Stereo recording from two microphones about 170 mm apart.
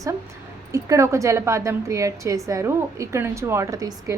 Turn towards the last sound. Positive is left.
turn(degrees=-20)  # may be behind; listen again after turning